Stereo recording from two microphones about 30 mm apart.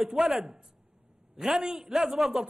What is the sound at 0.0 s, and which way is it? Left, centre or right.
Speech, centre.